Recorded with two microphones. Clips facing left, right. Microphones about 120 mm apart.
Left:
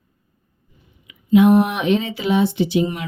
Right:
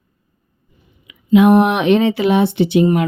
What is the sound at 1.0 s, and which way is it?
Speech, 90° right.